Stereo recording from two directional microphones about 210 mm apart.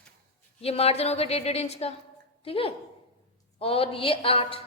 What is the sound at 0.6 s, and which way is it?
A woman's voice, 30° left (ahead or behind).